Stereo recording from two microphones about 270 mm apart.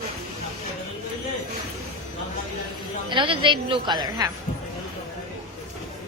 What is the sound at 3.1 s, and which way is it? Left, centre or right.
A woman's voice, centre.